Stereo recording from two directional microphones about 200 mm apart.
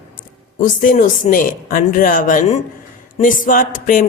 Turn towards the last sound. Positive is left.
turn(degrees=40)  # may be behind; listen again after turning